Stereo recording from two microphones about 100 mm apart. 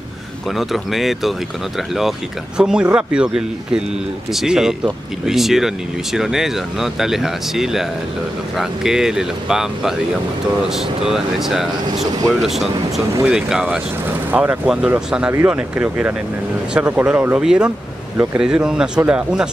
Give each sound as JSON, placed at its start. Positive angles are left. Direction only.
{"t": 0.6, "sound": "speech", "side_deg": 0}
{"t": 14.3, "sound": "speech", "side_deg": -20}
{"t": 14.7, "sound": "speech", "side_deg": -10}
{"t": 18.1, "sound": "speech", "side_deg": -20}
{"t": 18.4, "sound": "speech", "side_deg": -5}